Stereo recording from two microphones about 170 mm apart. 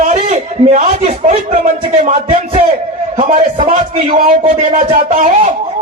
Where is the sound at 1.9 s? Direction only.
45° right (ahead or behind).